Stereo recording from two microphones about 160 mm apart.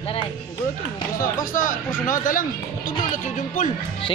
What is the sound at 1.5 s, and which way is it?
Speech, 60° left (ahead or behind).